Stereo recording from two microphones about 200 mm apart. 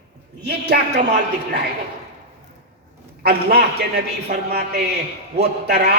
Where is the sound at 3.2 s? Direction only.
55° right (ahead or behind).